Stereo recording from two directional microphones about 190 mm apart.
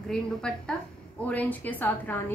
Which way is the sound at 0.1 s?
5° left (ahead or behind).